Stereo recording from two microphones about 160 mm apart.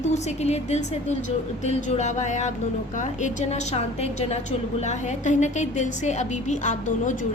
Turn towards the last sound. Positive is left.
turn(degrees=50)  # may be behind; listen again after turning